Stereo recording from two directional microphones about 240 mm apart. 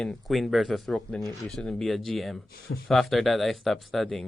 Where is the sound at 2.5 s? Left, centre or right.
Left.